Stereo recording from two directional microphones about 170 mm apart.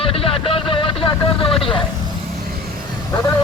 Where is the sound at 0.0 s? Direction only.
35° left (ahead or behind).